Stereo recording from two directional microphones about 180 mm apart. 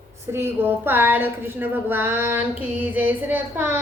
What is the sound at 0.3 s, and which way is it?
Speech, 10° right (ahead or behind).